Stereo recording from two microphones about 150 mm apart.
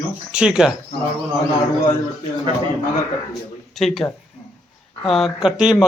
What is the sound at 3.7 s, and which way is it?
A man's voice, centre (ahead or behind).